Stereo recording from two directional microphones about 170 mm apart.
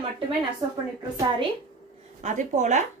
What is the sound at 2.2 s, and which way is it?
Speech, 45° right (ahead or behind).